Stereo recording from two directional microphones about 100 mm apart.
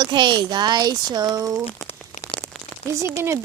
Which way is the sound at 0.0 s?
50° right (ahead or behind).